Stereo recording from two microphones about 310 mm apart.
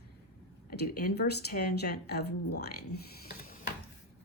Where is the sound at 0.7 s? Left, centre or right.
Left.